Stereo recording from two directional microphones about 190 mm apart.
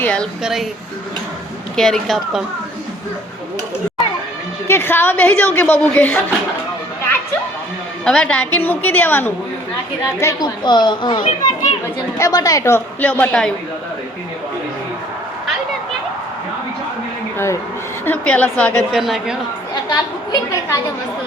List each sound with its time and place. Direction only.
0.0 s speech: 5° left (ahead or behind)
1.7 s speech: 5° left (ahead or behind)
4.7 s a woman's voice: 10° left (ahead or behind)
8.0 s a woman's voice: 5° left (ahead or behind)
17.3 s a woman's voice: 15° left (ahead or behind); by 19.4 s centre (ahead or behind)
19.9 s a woman's voice: 20° left (ahead or behind)